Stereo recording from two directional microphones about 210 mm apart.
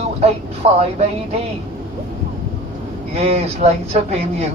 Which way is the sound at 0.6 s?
30° right (ahead or behind).